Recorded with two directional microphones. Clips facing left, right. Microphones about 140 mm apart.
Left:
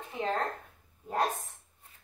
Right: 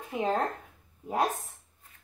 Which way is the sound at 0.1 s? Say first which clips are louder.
Right 4 dB; 20° right (ahead or behind).